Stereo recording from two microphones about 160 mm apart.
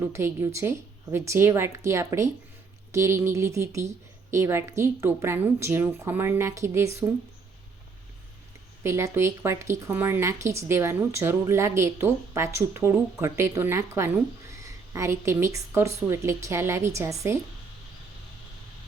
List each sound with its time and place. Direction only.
0.0 s speech: 15° right (ahead or behind)
8.8 s speech: 15° right (ahead or behind)